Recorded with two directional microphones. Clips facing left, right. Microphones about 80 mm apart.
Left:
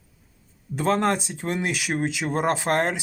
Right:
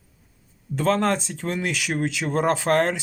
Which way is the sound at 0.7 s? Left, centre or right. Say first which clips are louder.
Right 1 dB; centre.